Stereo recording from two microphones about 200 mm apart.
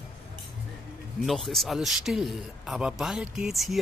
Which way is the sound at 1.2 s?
Centre (ahead or behind).